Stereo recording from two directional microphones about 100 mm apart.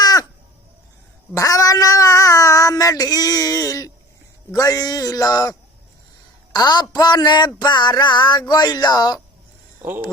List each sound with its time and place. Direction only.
0.0 s crow: 40° left (ahead or behind)
1.4 s cat: 35° left (ahead or behind)
4.5 s a man's voice: 35° left (ahead or behind)
6.9 s a sound: 45° left (ahead or behind)